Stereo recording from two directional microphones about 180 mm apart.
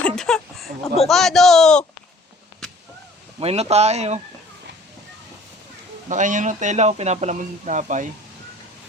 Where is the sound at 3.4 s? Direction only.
35° right (ahead or behind).